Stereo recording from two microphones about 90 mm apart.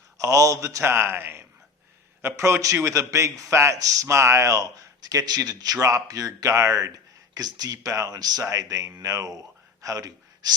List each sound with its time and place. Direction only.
0.2 s a man's voice: 35° right (ahead or behind)